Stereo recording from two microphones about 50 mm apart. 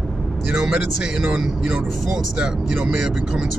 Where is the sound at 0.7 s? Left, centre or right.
Centre.